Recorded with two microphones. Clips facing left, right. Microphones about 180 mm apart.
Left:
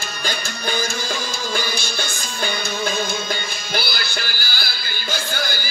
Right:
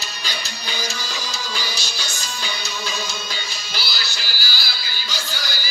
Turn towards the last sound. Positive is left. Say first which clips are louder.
# left 6 dB
turn(degrees=55)  # may be behind; listen again after turning